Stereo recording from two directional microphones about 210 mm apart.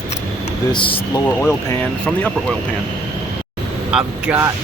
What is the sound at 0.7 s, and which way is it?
Speech, 25° left (ahead or behind).